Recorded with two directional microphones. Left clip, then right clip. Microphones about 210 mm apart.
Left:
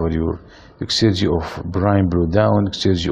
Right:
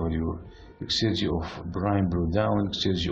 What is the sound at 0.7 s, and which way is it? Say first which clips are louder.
Speech: left 8 dB; 35° left (ahead or behind).